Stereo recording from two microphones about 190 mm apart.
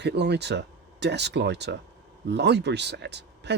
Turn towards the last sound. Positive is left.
turn(degrees=-65)  # may be behind; listen again after turning